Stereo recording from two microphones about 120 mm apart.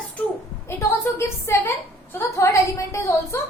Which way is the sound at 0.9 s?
20° left (ahead or behind).